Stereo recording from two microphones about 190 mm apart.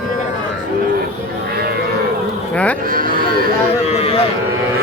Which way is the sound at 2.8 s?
50° right (ahead or behind).